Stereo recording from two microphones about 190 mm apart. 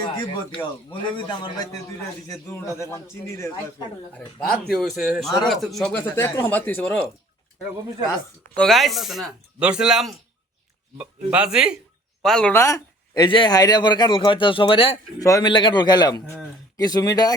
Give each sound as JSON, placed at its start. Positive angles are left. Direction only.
{"t": 0.5, "sound": "a man's voice", "side_deg": 25}
{"t": 8.5, "sound": "a man's voice", "side_deg": 0}
{"t": 15.2, "sound": "a man's voice", "side_deg": 20}